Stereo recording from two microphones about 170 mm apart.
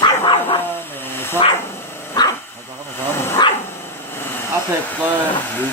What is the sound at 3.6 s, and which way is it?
Dog, 15° left (ahead or behind).